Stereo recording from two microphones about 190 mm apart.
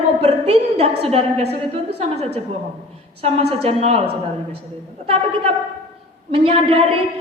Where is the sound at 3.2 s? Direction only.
30° right (ahead or behind).